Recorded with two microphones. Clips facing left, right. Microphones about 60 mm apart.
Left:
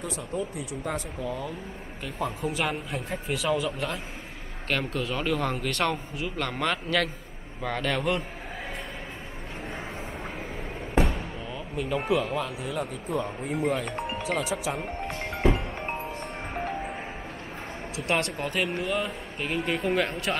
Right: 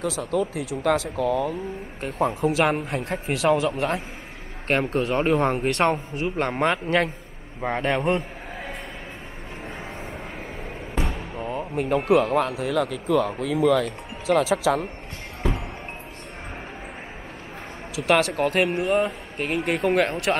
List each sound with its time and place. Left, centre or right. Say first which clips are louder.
0.0 s speech: right 7 dB; right
2.0 s speech: right 7 dB; right
2.7 s speech: right 6 dB; right
3.0 s speech: right 6 dB; right
4.6 s a man's voice: right 6 dB; right
11.0 s basketball bounce: left 4 dB; centre
11.3 s music: right 6 dB; right
12.1 s speech: right 9 dB; right
14.2 s speech: right 11 dB; right
18.1 s speech: right 7 dB; right